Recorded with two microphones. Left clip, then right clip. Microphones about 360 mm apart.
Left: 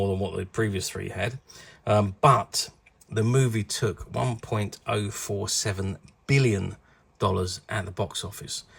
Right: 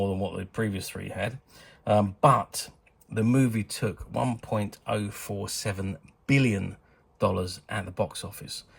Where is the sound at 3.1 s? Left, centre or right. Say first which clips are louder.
Even; centre.